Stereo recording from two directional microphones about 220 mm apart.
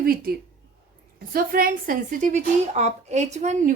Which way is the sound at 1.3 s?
40° right (ahead or behind).